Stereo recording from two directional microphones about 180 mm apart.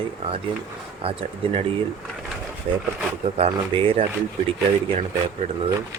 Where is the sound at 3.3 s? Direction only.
30° right (ahead or behind).